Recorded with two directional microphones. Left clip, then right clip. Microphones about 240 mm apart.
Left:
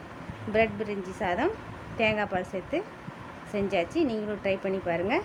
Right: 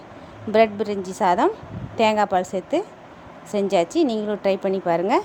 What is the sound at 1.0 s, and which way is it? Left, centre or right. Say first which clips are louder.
A woman's voice: right 10 dB; centre.